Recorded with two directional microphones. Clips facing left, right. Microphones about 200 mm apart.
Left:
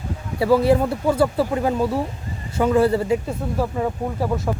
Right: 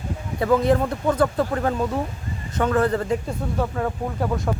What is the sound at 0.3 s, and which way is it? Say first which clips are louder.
Speech: left 2 dB; 10° left (ahead or behind).